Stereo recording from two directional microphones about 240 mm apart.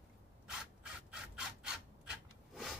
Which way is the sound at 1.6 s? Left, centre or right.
Centre.